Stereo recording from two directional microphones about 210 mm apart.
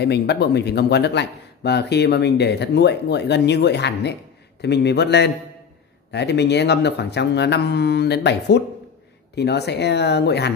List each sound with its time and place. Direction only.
0.0 s speech: 50° left (ahead or behind)